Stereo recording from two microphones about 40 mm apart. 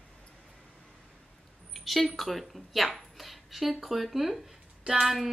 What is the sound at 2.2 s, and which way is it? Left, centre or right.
Speech, centre.